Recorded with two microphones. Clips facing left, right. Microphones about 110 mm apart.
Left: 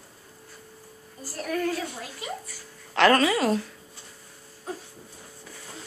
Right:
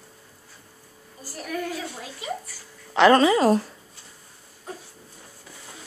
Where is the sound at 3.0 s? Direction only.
20° right (ahead or behind).